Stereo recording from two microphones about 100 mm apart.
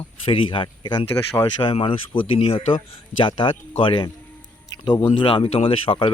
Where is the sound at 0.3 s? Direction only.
60° left (ahead or behind).